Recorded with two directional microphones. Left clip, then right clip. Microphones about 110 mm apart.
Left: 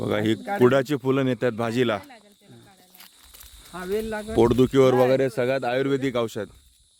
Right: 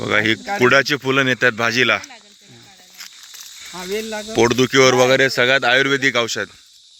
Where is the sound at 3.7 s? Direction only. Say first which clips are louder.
Right 3 dB; 85° right.